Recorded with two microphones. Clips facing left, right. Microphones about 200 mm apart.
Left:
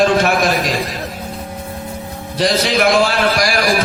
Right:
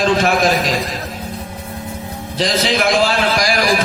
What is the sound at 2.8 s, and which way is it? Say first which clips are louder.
Speech: left 3 dB; 45° left (ahead or behind).